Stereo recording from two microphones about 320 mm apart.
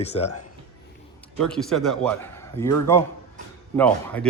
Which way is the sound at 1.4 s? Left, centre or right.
Centre.